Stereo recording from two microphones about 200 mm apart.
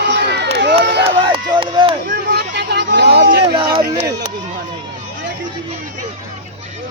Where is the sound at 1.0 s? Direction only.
25° right (ahead or behind).